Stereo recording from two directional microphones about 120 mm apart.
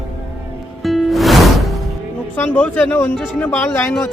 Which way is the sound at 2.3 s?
15° left (ahead or behind).